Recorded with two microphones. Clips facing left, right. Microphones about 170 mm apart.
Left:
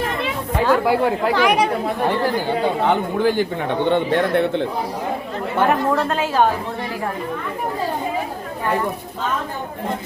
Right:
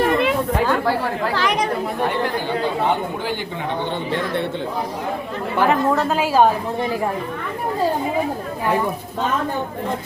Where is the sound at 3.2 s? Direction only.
50° left (ahead or behind).